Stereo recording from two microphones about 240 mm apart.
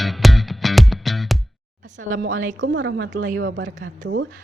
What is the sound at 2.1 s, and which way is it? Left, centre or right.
Speech, right.